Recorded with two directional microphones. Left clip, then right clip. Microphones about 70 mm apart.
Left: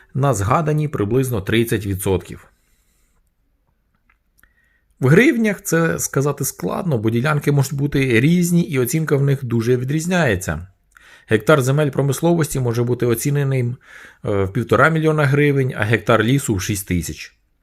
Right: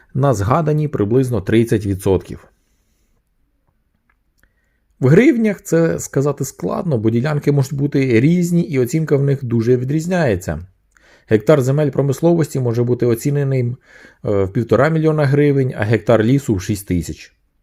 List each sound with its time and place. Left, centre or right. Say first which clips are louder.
0.2 s speech: right 2 dB; right
4.9 s speech: right 2 dB; centre
7.5 s speech: right 2 dB; centre; by 17.3 s right